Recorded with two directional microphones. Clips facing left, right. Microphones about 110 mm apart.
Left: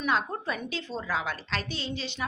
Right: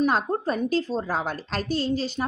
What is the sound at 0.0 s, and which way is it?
A woman's voice, 40° right (ahead or behind).